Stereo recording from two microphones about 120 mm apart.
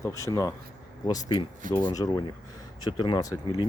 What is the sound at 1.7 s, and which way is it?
Speech, 40° left (ahead or behind).